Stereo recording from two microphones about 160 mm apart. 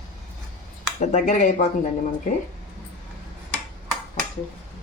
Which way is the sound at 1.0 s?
50° left (ahead or behind).